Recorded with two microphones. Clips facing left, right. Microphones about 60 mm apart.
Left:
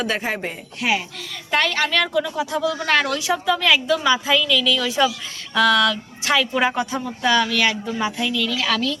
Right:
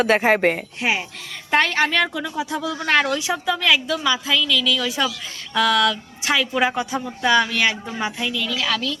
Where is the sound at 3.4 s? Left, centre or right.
Centre.